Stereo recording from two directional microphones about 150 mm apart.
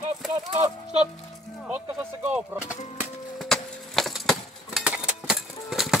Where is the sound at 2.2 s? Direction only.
10° right (ahead or behind).